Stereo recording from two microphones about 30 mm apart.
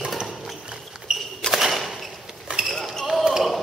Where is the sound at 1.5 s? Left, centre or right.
Centre.